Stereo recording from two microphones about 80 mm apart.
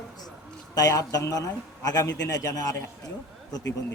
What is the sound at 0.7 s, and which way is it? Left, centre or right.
A man's voice, left.